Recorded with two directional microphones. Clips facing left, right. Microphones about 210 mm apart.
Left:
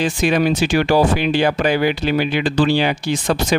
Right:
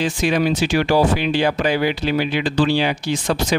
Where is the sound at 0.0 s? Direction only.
55° left (ahead or behind).